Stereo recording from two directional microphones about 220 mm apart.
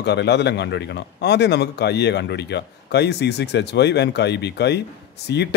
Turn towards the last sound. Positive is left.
turn(degrees=50)  # may be behind; listen again after turning